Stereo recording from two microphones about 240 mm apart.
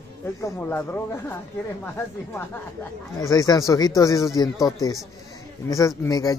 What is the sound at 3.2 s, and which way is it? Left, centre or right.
A man's voice, centre.